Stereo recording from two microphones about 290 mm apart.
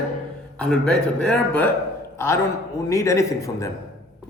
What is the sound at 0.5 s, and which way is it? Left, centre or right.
Speech, centre.